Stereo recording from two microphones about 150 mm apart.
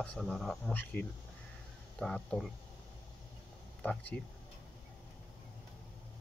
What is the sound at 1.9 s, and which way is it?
Speech, 5° left (ahead or behind).